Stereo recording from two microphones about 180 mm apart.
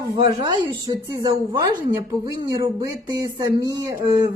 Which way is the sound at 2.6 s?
20° right (ahead or behind).